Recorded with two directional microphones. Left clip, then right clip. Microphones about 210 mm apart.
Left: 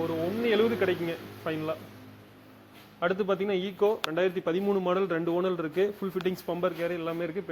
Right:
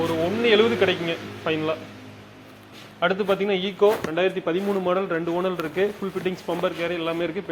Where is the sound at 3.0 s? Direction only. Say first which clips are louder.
Right 6 dB; 40° left (ahead or behind).